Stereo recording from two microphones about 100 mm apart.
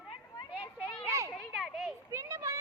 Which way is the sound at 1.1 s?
30° right (ahead or behind).